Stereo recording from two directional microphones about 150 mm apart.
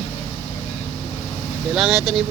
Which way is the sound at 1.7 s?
Centre (ahead or behind).